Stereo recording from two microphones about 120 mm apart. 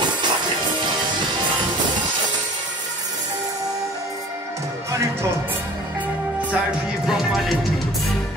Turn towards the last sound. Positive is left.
turn(degrees=0)  # may be behind; listen again after turning